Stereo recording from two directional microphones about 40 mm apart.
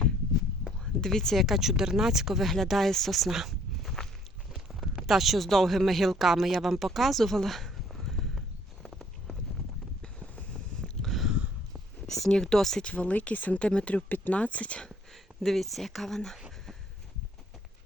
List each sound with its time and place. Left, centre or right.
1.0 s speech: centre
1.4 s speech: centre
2.7 s speech: centre
4.0 s walk: centre
4.9 s speech: centre
8.0 s clip-clop: centre
10.8 s a sound: centre
12.0 s speech: centre
12.8 s speech: left
13.3 s speech: left
13.6 s speech: left
13.9 s speech: left
15.1 s speech: centre